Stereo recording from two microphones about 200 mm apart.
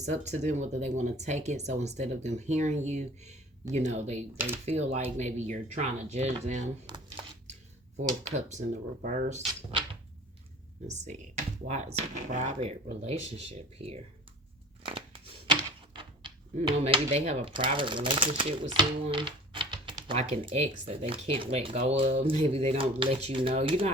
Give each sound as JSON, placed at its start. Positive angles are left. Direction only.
{"t": 0.1, "sound": "speech", "side_deg": -35}
{"t": 6.8, "sound": "speech", "side_deg": -20}
{"t": 7.9, "sound": "speech", "side_deg": -35}
{"t": 9.5, "sound": "drawer open or close", "side_deg": -25}
{"t": 10.8, "sound": "speech", "side_deg": -35}
{"t": 14.8, "sound": "a sound", "side_deg": -25}
{"t": 16.6, "sound": "speech", "side_deg": -30}